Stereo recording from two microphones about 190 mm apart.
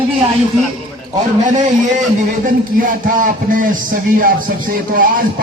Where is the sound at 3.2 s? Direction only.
45° right (ahead or behind).